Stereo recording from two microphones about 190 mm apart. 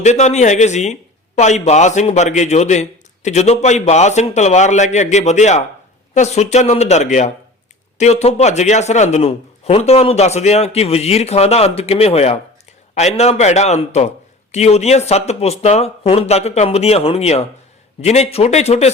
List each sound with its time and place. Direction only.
0.0 s speech: 35° left (ahead or behind)